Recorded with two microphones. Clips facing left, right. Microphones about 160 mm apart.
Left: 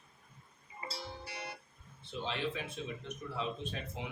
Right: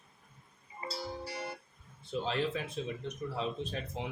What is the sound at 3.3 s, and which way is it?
Speech, 35° right (ahead or behind).